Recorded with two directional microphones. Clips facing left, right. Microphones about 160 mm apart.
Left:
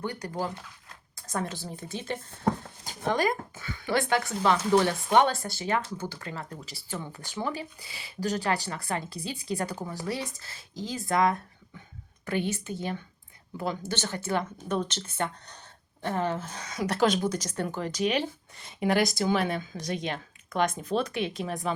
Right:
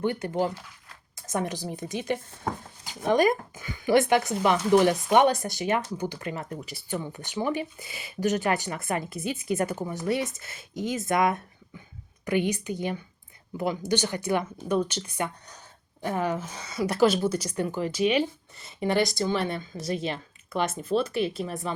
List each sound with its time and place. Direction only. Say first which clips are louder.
0.0 s a woman's voice: right 6 dB; 20° right (ahead or behind); by 21.7 s centre (ahead or behind)